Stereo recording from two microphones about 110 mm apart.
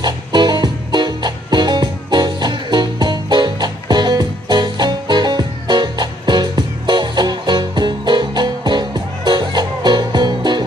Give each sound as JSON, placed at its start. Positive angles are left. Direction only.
{"t": 0.0, "sound": "music", "side_deg": -40}